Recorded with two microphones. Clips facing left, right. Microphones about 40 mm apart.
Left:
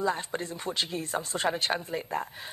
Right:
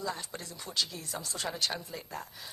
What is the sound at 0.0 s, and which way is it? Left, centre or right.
Speech, left.